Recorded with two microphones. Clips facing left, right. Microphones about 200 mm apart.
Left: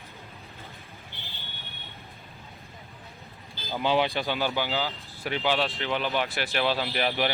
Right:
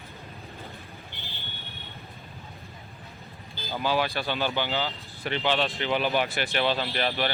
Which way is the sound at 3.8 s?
20° left (ahead or behind).